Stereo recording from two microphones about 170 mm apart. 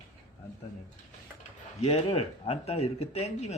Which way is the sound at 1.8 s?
35° left (ahead or behind).